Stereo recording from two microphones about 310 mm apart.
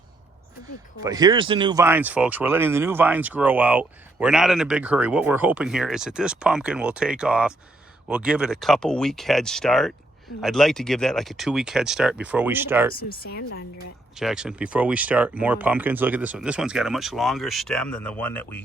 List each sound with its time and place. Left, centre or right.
1.0 s speech: centre
13.2 s speech: left
14.2 s speech: centre